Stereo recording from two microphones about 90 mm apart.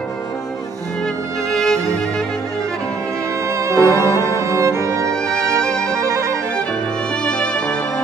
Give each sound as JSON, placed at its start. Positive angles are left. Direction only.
{"t": 1.5, "sound": "music", "side_deg": 5}
{"t": 3.4, "sound": "music", "side_deg": -35}
{"t": 4.0, "sound": "music", "side_deg": 35}
{"t": 4.4, "sound": "music", "side_deg": -35}
{"t": 7.2, "sound": "music", "side_deg": 10}